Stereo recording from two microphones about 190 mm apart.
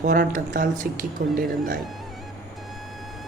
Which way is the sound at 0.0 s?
45° right (ahead or behind).